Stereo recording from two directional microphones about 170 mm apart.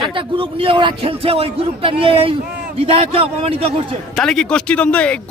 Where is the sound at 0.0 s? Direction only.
30° right (ahead or behind).